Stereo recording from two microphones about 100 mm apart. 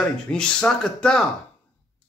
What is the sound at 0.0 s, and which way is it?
Speech, 10° left (ahead or behind).